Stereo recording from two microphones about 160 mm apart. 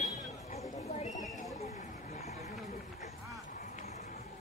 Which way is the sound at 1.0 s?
50° left (ahead or behind).